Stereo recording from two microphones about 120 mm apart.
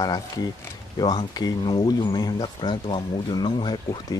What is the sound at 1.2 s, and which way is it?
Speech, 35° left (ahead or behind).